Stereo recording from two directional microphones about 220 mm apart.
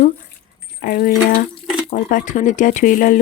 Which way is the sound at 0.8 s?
40° left (ahead or behind).